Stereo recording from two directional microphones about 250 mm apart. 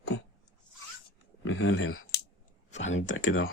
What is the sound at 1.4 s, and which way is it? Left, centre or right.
Speech, left.